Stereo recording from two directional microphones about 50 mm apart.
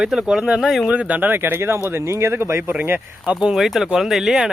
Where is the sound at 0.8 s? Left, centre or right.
Right.